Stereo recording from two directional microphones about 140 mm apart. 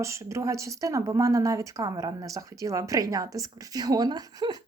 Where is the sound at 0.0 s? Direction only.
20° right (ahead or behind).